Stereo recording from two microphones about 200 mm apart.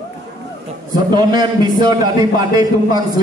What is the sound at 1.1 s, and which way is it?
A man's voice, 20° right (ahead or behind).